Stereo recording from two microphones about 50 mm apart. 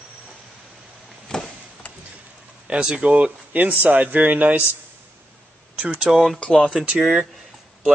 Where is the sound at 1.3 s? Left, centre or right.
Centre.